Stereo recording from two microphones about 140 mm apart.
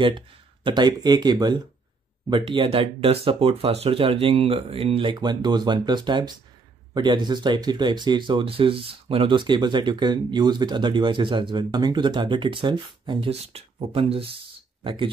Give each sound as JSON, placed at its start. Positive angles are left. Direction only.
{"t": 0.7, "sound": "speech", "side_deg": -30}